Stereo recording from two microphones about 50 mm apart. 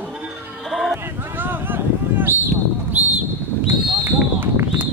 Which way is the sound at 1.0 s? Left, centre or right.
Right.